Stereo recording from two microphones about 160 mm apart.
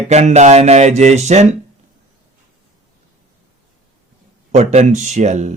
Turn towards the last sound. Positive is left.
turn(degrees=-45)  # may be behind; listen again after turning